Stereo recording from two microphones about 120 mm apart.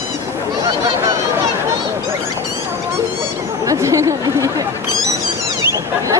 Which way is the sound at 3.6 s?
25° right (ahead or behind).